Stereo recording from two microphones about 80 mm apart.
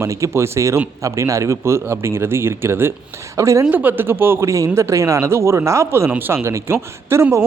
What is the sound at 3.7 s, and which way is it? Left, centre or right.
Speech, right.